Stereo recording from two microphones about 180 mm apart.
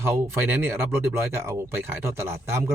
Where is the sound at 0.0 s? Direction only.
15° right (ahead or behind).